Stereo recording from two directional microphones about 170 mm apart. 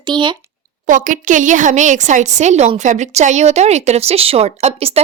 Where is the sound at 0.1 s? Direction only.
25° right (ahead or behind).